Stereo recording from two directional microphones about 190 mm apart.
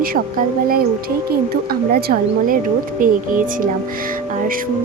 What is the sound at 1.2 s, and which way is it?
Speech, 55° right (ahead or behind).